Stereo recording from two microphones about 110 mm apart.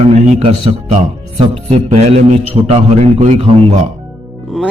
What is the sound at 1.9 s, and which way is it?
A man's voice, 75° right (ahead or behind).